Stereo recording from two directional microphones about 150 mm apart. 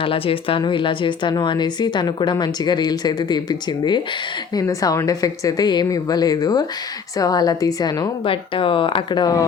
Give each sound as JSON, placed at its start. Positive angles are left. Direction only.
{"t": 0.0, "sound": "a woman's voice", "side_deg": 35}